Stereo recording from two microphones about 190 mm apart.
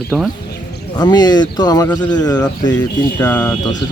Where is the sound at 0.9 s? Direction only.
20° left (ahead or behind).